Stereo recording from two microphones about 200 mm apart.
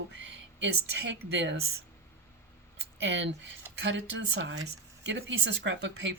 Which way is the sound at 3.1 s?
60° right (ahead or behind).